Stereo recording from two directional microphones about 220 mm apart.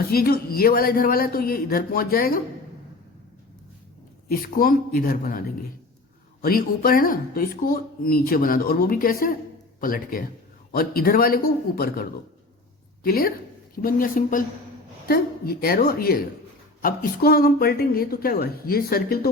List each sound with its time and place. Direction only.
0.1 s a woman's voice: 45° left (ahead or behind)
4.3 s a woman's voice: 40° left (ahead or behind)